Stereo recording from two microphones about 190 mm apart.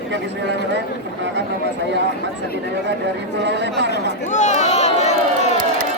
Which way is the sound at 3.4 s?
65° right (ahead or behind).